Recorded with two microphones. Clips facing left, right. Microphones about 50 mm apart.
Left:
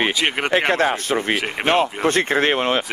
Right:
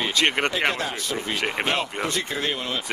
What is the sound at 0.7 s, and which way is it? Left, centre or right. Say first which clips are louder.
Speech: left 9 dB; left.